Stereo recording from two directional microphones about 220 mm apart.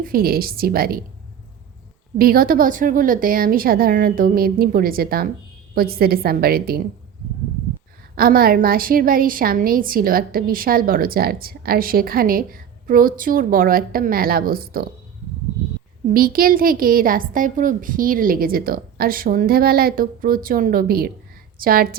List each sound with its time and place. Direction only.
0.0 s a woman's voice: 40° right (ahead or behind)
2.1 s a woman's voice: 40° right (ahead or behind)
8.1 s a woman's voice: 40° right (ahead or behind)
16.1 s a woman's voice: 40° right (ahead or behind)